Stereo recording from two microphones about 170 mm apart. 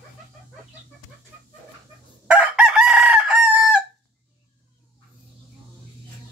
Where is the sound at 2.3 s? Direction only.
5° right (ahead or behind).